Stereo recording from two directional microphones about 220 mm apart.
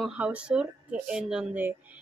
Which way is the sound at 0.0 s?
5° right (ahead or behind).